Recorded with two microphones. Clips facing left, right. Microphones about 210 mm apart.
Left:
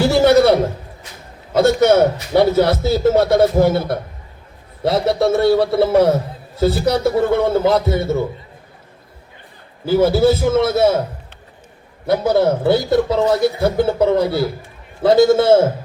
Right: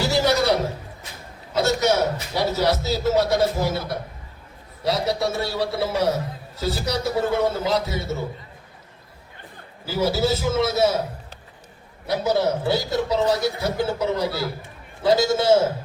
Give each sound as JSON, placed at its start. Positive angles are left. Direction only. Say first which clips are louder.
{"t": 0.0, "sound": "a sound", "louder": "left 9 dB", "side_deg": 55}
{"t": 1.5, "sound": "a man's voice", "louder": "left 8 dB", "side_deg": 55}
{"t": 9.8, "sound": "a man's voice", "louder": "left 9 dB", "side_deg": 55}
{"t": 12.0, "sound": "a man's voice", "louder": "left 6 dB", "side_deg": 55}